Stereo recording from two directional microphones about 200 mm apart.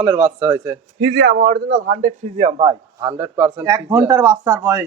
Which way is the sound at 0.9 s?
60° right (ahead or behind).